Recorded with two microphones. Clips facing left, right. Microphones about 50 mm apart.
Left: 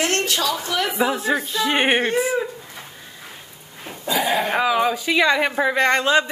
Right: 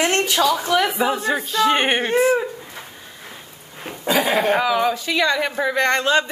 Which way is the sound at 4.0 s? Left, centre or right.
Right.